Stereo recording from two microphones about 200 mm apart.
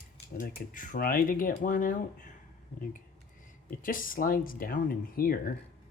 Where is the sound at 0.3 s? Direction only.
45° left (ahead or behind).